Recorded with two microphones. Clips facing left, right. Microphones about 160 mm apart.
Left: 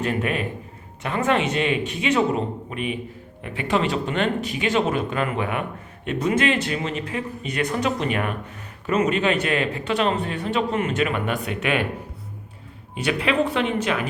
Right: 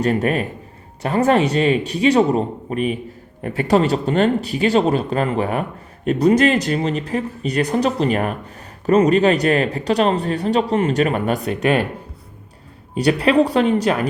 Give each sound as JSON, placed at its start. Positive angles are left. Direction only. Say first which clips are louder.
{"t": 0.0, "sound": "speech", "louder": "right 6 dB", "side_deg": -40}
{"t": 12.9, "sound": "speech", "louder": "right 7 dB", "side_deg": -35}